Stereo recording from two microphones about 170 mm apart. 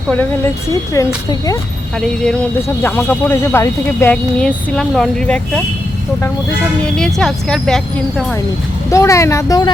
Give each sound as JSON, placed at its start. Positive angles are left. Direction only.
{"t": 0.7, "sound": "speech", "side_deg": 20}
{"t": 2.0, "sound": "speech", "side_deg": 5}
{"t": 6.8, "sound": "a woman's voice", "side_deg": 5}
{"t": 8.9, "sound": "speech", "side_deg": 15}